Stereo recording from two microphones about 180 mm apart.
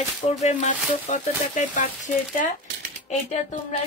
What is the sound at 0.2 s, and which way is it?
A woman's voice, 40° left (ahead or behind).